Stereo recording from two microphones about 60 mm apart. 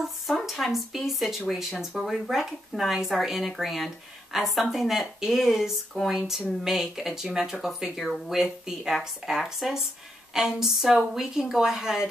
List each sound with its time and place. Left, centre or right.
0.0 s speech: centre